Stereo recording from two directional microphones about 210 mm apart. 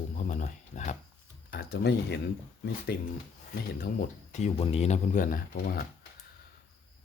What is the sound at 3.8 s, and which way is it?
Speech, 40° left (ahead or behind).